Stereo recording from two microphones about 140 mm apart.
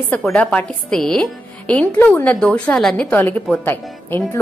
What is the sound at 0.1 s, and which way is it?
A woman's voice, 10° left (ahead or behind).